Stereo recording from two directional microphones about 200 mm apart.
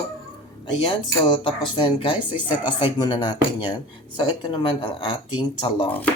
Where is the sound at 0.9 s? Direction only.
25° left (ahead or behind).